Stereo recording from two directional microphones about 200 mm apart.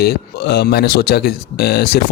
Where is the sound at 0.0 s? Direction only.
50° left (ahead or behind).